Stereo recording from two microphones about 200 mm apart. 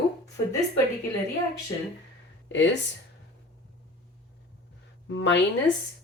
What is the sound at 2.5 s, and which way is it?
Speech, 65° left (ahead or behind).